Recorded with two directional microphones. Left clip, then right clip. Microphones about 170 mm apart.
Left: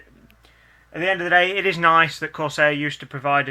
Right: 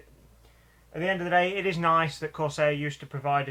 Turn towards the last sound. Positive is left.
turn(degrees=45)  # may be behind; listen again after turning